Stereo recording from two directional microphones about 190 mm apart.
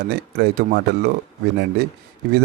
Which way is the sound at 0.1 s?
55° right (ahead or behind).